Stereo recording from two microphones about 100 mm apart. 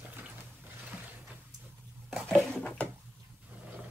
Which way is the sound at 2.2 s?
10° left (ahead or behind).